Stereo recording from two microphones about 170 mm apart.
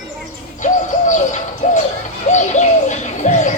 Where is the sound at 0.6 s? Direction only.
45° left (ahead or behind).